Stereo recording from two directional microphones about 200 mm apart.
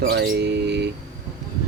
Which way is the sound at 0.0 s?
55° right (ahead or behind).